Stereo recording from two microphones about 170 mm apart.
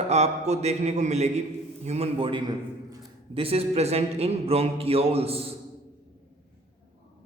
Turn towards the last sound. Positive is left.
turn(degrees=-35)  # may be behind; listen again after turning